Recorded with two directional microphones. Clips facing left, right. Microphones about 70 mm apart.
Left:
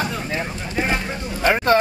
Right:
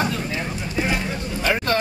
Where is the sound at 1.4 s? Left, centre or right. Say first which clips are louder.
Left 5 dB; left.